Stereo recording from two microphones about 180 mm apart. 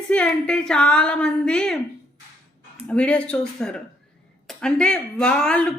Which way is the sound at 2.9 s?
5° left (ahead or behind).